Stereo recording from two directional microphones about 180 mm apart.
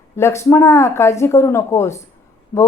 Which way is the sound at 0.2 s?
15° left (ahead or behind).